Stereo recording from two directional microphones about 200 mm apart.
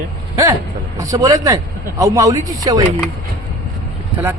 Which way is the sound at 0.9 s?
15° right (ahead or behind).